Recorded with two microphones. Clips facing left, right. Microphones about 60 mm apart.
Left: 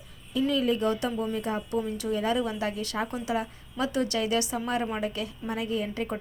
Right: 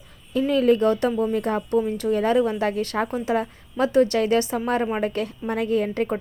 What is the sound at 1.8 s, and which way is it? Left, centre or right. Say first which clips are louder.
A woman's voice: right 8 dB; right.